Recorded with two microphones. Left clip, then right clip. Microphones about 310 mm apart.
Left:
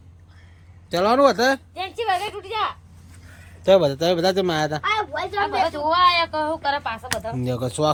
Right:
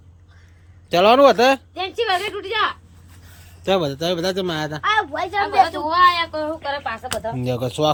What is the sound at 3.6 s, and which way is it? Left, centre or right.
Speech, centre.